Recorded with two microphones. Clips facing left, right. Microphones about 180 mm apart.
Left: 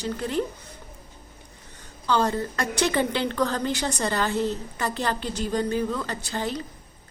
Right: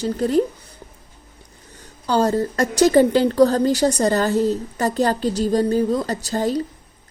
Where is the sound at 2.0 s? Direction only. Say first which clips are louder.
Right 5 dB; 40° right (ahead or behind).